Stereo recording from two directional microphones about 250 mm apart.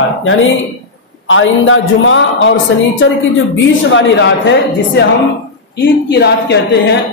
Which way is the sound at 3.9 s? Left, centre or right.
Left.